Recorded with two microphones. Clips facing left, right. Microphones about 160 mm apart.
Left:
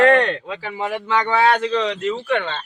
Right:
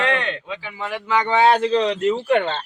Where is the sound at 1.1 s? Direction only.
20° right (ahead or behind).